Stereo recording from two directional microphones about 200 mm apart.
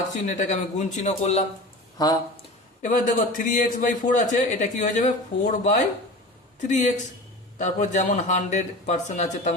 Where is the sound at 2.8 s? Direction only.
40° left (ahead or behind).